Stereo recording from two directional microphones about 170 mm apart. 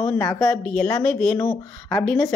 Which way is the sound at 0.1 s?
20° left (ahead or behind).